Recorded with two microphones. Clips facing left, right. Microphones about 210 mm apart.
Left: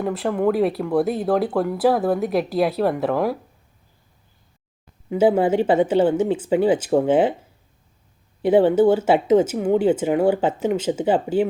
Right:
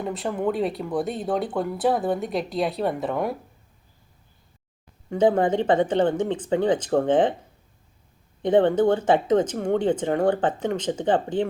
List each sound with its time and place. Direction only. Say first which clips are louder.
0.0 s speech: left 5 dB; centre (ahead or behind)
5.0 s speech: left 3 dB; 5° left (ahead or behind)
8.4 s speech: left 3 dB; 10° left (ahead or behind)